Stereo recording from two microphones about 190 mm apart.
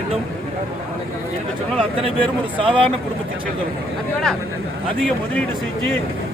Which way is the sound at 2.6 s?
30° right (ahead or behind).